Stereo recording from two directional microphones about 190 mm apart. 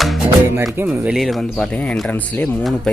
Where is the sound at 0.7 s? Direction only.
10° right (ahead or behind).